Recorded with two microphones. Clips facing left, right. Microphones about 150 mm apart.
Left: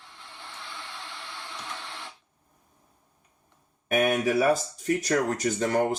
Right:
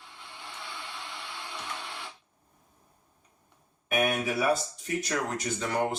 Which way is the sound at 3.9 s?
45° left (ahead or behind).